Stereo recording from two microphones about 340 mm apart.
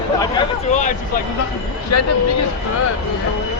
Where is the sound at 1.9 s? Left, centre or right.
Left.